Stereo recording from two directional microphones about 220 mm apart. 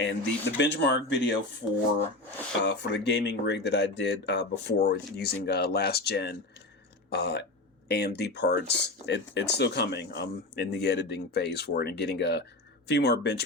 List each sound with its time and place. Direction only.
0.0 s speech: 55° left (ahead or behind)
2.6 s speech: 50° left (ahead or behind)